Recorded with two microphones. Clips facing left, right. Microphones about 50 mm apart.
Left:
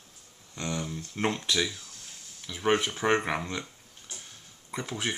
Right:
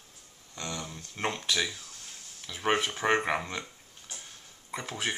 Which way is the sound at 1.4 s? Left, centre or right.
Centre.